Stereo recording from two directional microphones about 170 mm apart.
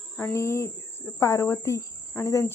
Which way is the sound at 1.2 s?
15° left (ahead or behind).